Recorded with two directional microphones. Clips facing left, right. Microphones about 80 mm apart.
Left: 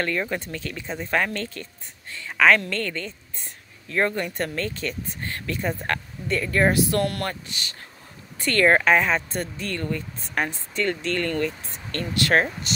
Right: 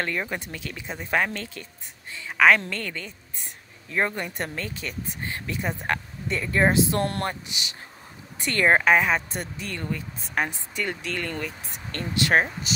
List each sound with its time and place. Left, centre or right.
0.0 s speech: centre
7.4 s speech: centre
12.7 s speech: centre